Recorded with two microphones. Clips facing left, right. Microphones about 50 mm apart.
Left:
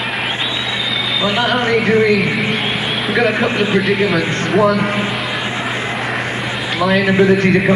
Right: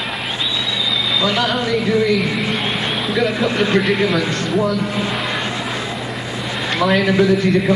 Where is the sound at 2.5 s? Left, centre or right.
Centre.